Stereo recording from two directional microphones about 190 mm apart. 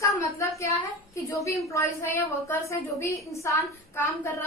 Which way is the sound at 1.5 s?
15° left (ahead or behind).